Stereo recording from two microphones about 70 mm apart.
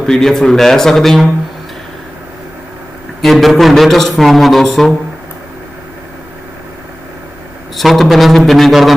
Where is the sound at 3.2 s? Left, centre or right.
Centre.